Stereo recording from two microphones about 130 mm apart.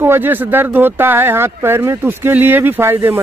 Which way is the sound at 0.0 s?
15° right (ahead or behind).